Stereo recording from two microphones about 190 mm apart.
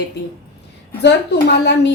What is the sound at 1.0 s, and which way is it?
Speech, 65° left (ahead or behind).